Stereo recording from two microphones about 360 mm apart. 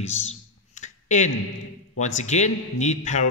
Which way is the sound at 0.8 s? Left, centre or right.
Centre.